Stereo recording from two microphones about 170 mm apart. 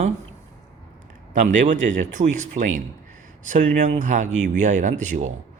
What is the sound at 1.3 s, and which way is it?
Speech, 50° right (ahead or behind).